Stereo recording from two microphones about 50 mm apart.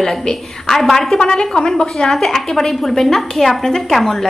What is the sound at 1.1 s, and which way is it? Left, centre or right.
A woman's voice, centre.